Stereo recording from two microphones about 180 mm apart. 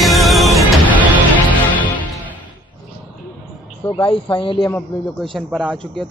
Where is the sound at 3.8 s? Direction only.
25° left (ahead or behind).